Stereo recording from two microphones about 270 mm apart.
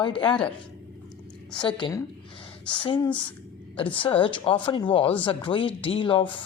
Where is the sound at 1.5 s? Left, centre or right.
Centre.